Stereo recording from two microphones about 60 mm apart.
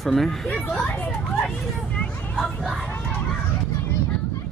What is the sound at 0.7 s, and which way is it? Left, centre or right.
Speech, left.